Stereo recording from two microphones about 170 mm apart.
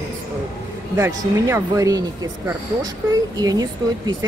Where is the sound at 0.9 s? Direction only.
15° right (ahead or behind).